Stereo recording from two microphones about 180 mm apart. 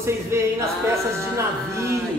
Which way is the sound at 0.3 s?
15° right (ahead or behind).